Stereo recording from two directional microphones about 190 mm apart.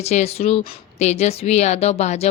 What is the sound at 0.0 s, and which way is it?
Speech, 35° left (ahead or behind).